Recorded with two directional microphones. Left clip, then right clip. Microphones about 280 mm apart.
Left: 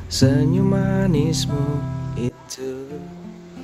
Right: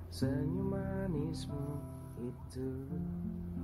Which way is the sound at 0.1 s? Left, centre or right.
Left.